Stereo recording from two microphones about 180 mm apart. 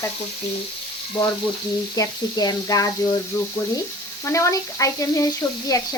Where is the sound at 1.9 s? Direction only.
20° left (ahead or behind).